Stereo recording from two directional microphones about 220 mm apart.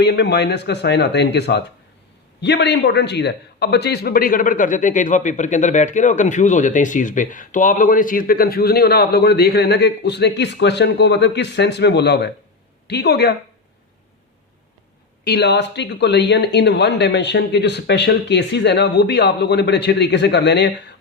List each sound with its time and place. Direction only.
0.0 s a man's voice: 50° left (ahead or behind)
15.2 s a man's voice: 50° left (ahead or behind)